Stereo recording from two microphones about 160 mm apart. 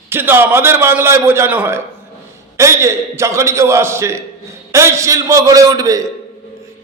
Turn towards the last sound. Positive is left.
turn(degrees=-20)  # may be behind; listen again after turning